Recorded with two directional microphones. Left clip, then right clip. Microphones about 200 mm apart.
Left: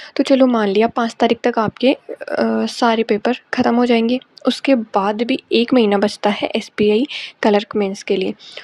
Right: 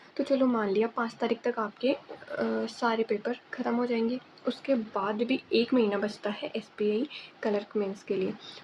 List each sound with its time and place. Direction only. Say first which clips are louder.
0.1 s a woman's voice: left 13 dB; 45° left (ahead or behind)